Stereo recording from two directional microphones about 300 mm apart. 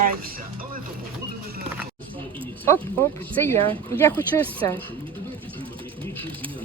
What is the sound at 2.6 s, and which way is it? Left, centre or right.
Speech, centre.